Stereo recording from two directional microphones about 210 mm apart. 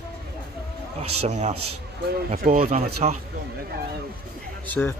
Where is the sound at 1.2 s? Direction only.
35° right (ahead or behind).